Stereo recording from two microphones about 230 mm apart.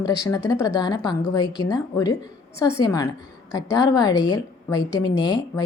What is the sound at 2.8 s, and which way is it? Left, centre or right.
A woman's voice, centre.